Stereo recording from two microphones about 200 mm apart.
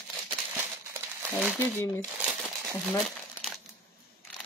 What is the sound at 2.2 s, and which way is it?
Crumpling, centre (ahead or behind).